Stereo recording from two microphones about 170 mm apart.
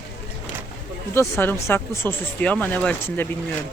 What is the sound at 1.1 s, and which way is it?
Speech, 15° left (ahead or behind).